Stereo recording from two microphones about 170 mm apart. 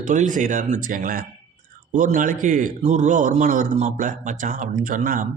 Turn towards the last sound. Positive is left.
turn(degrees=-50)  # may be behind; listen again after turning